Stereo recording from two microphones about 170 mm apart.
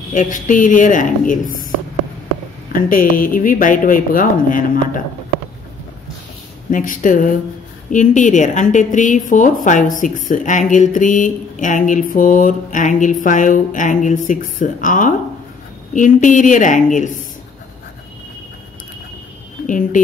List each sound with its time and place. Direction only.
0.1 s a woman's voice: 50° left (ahead or behind)
2.7 s a woman's voice: 55° left (ahead or behind)
6.7 s a woman's voice: 50° left (ahead or behind)
19.6 s speech: 50° left (ahead or behind)